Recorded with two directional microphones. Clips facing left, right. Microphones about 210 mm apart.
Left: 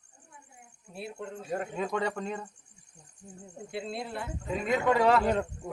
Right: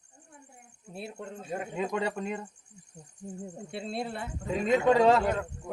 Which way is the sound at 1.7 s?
15° right (ahead or behind).